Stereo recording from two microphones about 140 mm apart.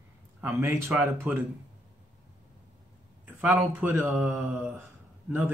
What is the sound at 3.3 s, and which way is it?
Speech, 15° right (ahead or behind).